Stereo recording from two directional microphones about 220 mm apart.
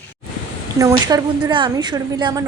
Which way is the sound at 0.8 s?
15° right (ahead or behind).